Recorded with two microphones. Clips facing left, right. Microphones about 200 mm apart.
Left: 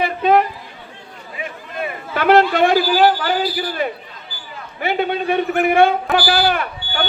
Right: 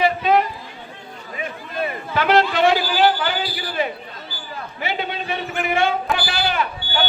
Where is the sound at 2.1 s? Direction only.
50° left (ahead or behind).